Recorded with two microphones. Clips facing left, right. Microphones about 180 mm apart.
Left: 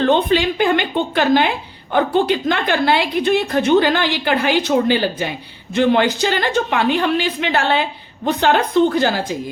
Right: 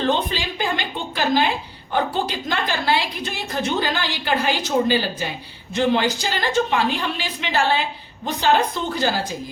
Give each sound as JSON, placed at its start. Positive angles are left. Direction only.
{"t": 0.0, "sound": "a woman's voice", "side_deg": 60}